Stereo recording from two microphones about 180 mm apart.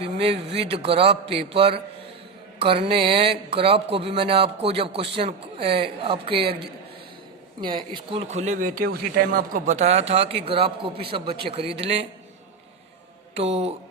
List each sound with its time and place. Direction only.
0.0 s speech: 35° right (ahead or behind)
7.6 s speech: 25° right (ahead or behind)
8.3 s speech: 40° right (ahead or behind)
13.3 s speech: 35° right (ahead or behind)